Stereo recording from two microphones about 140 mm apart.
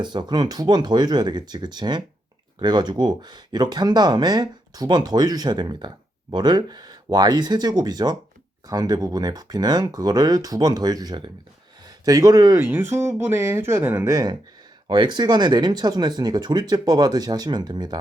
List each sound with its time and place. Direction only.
0.0 s speech: 30° right (ahead or behind)